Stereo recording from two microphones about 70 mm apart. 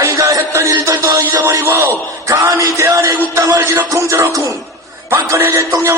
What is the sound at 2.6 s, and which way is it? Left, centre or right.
Music, right.